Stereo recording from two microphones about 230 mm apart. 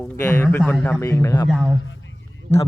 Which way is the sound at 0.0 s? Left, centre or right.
Centre.